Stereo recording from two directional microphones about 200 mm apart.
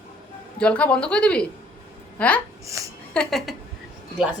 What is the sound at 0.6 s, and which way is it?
A woman's voice, 5° left (ahead or behind).